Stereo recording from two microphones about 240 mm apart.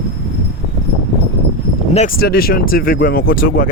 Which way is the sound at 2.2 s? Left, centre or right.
Left.